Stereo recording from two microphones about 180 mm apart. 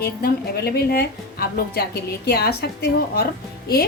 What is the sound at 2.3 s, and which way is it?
A woman's voice, 60° left (ahead or behind).